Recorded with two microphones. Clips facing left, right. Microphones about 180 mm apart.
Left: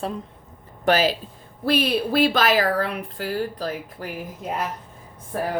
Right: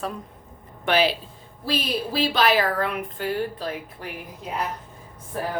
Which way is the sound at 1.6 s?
60° left (ahead or behind).